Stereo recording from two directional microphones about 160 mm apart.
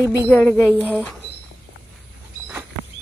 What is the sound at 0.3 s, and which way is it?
Music, 10° left (ahead or behind).